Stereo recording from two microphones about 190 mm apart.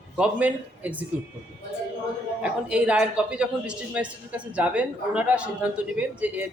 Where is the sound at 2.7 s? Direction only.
5° right (ahead or behind).